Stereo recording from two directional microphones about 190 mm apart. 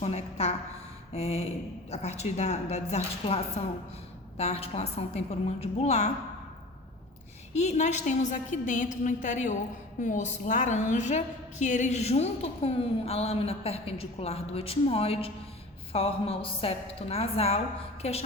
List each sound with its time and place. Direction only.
0.0 s a woman's voice: 35° left (ahead or behind)
7.5 s a woman's voice: 35° left (ahead or behind)